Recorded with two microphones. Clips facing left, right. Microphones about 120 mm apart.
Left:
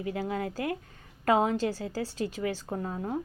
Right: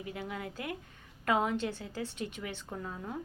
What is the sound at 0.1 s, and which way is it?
A woman's voice, 35° left (ahead or behind).